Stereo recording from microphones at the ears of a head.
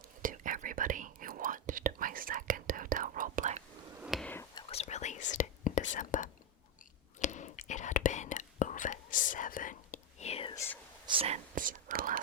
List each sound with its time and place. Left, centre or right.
0.2 s whispering: right
4.6 s whispering: left
11.2 s whispering: right